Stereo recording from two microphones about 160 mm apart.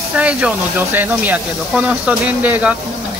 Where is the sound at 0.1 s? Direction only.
10° right (ahead or behind).